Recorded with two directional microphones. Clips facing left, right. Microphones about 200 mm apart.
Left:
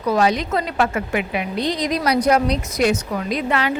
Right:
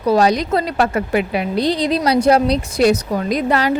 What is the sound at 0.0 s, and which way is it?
A woman's voice, 35° right (ahead or behind).